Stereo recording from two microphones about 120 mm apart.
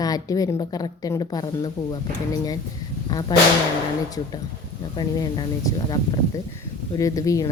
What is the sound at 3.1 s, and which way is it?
Speech, 35° left (ahead or behind).